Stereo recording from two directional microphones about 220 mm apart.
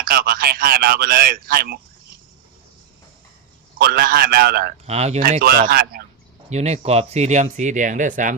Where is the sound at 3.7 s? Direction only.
40° right (ahead or behind).